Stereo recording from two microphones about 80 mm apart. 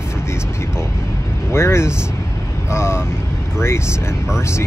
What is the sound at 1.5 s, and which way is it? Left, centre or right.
Speech, left.